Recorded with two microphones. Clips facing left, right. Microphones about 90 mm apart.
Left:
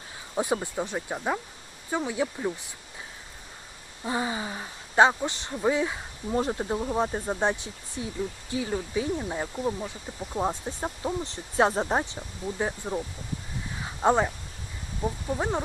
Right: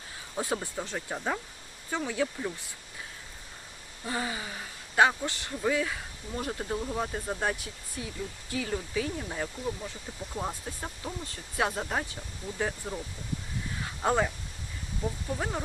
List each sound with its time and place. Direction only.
0.3 s speech: 20° left (ahead or behind)
4.0 s speech: 20° left (ahead or behind)